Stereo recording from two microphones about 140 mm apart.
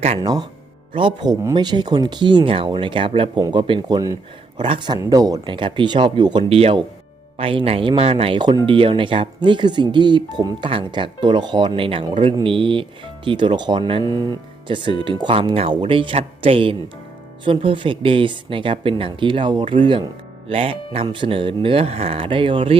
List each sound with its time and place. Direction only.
0.2 s speech: 30° right (ahead or behind)